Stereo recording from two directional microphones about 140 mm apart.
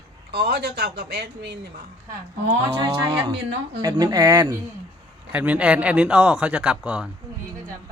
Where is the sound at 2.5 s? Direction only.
40° right (ahead or behind).